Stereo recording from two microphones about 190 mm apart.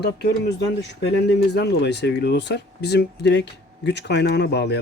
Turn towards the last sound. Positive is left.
turn(degrees=65)  # may be behind; listen again after turning